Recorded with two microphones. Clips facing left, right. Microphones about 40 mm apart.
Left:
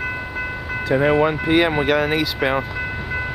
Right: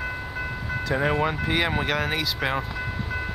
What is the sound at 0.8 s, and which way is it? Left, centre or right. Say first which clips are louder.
Speech: left 7 dB; centre.